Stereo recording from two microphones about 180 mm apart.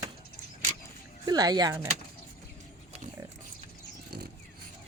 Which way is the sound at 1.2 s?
20° right (ahead or behind).